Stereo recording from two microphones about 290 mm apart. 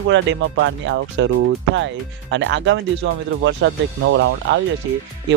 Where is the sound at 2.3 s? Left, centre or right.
Right.